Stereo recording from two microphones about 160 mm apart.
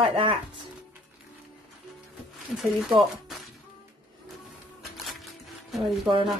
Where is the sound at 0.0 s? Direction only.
35° right (ahead or behind).